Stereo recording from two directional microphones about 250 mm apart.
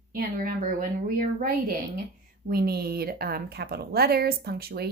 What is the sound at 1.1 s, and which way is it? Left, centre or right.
Speech, right.